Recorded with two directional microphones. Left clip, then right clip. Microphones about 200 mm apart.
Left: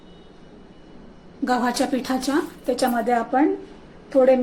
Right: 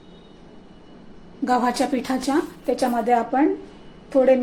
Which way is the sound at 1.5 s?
5° right (ahead or behind).